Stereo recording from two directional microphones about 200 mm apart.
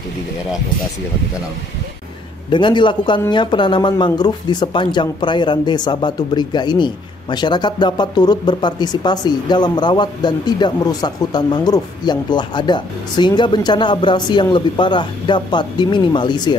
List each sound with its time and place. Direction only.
2.5 s speech: 25° left (ahead or behind)